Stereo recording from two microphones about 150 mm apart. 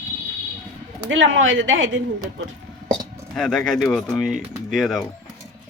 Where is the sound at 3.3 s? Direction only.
5° left (ahead or behind).